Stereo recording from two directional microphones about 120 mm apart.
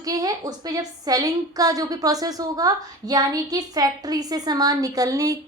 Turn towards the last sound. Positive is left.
turn(degrees=-30)  # may be behind; listen again after turning